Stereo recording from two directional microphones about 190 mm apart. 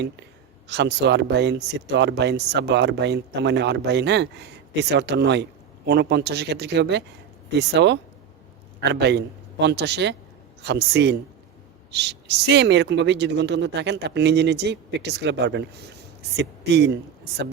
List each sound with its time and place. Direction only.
0.7 s a man's voice: 65° right (ahead or behind)